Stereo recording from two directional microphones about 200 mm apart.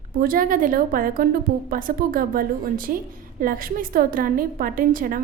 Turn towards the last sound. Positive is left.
turn(degrees=-45)  # may be behind; listen again after turning